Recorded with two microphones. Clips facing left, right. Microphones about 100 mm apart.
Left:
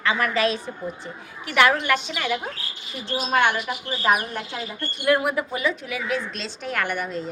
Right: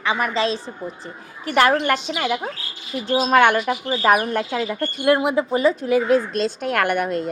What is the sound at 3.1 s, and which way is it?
A woman's voice, 50° right (ahead or behind).